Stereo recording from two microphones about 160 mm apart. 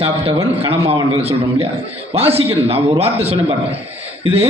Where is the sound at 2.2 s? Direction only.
35° right (ahead or behind).